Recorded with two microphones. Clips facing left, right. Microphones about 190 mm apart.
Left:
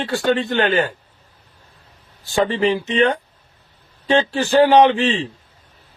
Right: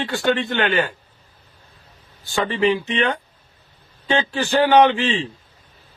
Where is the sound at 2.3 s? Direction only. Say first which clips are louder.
Left 2 dB; 35° left (ahead or behind).